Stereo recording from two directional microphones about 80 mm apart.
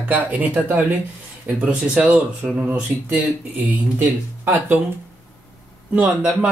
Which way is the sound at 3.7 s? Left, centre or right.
Right.